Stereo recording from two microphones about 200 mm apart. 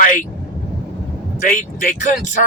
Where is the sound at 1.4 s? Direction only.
40° left (ahead or behind).